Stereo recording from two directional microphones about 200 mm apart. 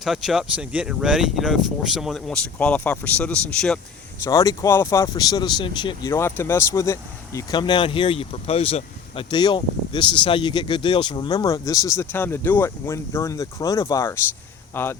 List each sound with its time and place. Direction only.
0.0 s speech: centre (ahead or behind)
4.2 s speech: 15° left (ahead or behind)